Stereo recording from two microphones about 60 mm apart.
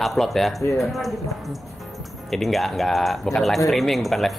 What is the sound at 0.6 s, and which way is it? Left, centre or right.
Speech, left.